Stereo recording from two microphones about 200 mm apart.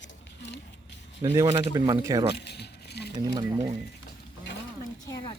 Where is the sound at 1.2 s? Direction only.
15° right (ahead or behind).